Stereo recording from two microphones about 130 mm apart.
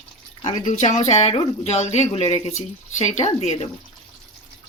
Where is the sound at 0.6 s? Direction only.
70° left (ahead or behind).